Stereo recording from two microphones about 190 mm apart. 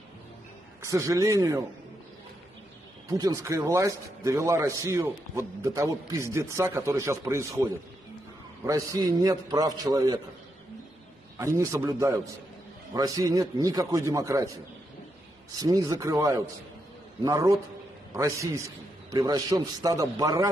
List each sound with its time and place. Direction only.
0.8 s a man's voice: 15° right (ahead or behind)
3.1 s a man's voice: 20° right (ahead or behind)
11.3 s a man's voice: 15° right (ahead or behind)
15.6 s a man's voice: 20° right (ahead or behind)